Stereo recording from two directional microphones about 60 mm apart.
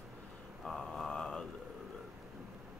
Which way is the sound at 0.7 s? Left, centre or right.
Centre.